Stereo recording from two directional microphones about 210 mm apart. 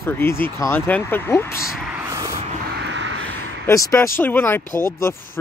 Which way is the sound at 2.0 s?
15° right (ahead or behind).